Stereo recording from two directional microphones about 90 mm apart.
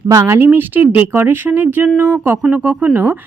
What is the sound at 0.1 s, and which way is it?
A woman's voice, 30° right (ahead or behind).